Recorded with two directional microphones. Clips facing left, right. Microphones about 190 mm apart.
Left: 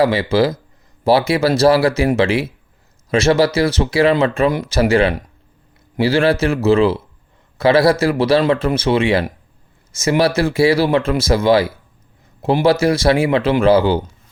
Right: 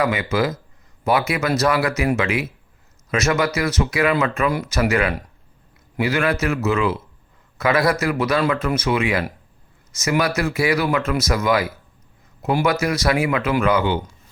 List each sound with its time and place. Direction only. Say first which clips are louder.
0.0 s speech: left 6 dB; 30° left (ahead or behind)